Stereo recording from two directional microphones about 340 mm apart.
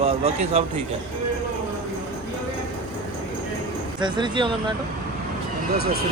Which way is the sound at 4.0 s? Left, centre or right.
Centre.